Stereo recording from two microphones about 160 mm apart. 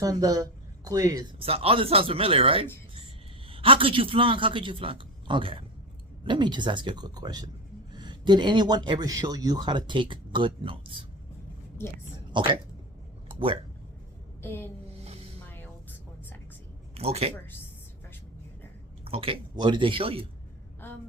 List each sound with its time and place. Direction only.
0.0 s speech: 20° right (ahead or behind)
1.4 s a man's voice: 35° right (ahead or behind)
12.3 s speech: 30° right (ahead or behind)
13.2 s a sound: 35° right (ahead or behind)
14.4 s a sound: 15° left (ahead or behind)
15.0 s music: 40° right (ahead or behind)
15.4 s music: 10° left (ahead or behind)
16.9 s speech: 40° right (ahead or behind)
19.0 s a man's voice: 35° right (ahead or behind)
20.8 s a sound: 15° left (ahead or behind)